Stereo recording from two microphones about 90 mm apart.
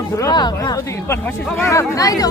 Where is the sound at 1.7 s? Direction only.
35° left (ahead or behind).